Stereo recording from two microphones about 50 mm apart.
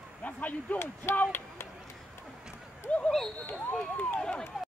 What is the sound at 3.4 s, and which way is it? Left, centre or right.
Speech, left.